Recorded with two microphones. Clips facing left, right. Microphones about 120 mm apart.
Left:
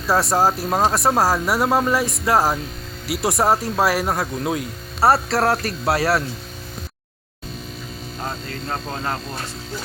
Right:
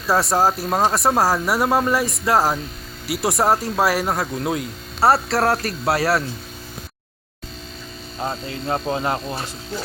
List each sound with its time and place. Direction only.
0.1 s speech: centre (ahead or behind)
8.6 s speech: 15° right (ahead or behind)